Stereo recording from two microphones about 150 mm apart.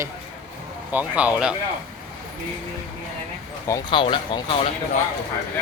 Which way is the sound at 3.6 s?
30° left (ahead or behind).